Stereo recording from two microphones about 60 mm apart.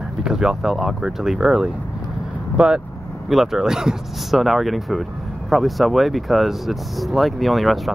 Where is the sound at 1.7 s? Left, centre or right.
Right.